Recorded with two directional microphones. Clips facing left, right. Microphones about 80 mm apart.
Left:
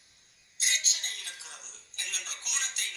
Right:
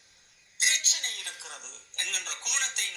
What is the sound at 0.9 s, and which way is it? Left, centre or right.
Music, right.